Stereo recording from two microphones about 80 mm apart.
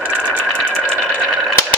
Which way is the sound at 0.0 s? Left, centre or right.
Centre.